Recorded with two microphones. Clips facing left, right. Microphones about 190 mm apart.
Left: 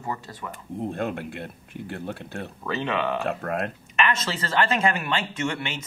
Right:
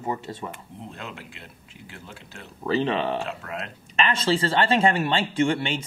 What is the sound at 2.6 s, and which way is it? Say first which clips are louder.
Speech: right 3 dB; 30° right (ahead or behind).